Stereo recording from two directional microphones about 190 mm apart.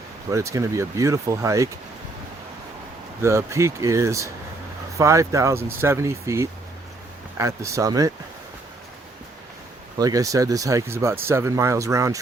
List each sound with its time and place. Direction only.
0.3 s speech: 15° right (ahead or behind)
3.2 s speech: 15° right (ahead or behind)
10.0 s speech: 20° right (ahead or behind)